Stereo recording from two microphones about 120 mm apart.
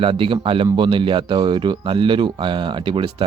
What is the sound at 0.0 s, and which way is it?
Speech, 45° right (ahead or behind).